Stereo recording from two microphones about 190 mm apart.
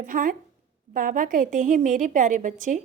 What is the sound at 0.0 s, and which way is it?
A woman's voice, 45° right (ahead or behind).